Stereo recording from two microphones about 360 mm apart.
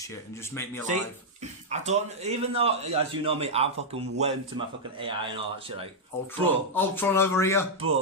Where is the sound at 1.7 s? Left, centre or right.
Centre.